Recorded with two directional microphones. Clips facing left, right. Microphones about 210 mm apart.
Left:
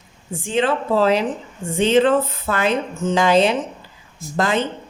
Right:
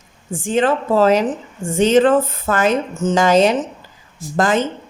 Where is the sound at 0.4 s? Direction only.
45° right (ahead or behind).